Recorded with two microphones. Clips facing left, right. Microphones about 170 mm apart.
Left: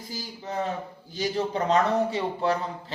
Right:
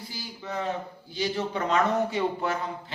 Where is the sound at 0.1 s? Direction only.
40° left (ahead or behind).